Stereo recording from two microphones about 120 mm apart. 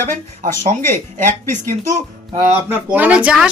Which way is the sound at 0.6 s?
90° right.